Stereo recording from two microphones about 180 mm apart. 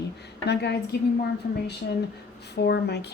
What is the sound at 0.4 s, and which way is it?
Speech, 65° left (ahead or behind).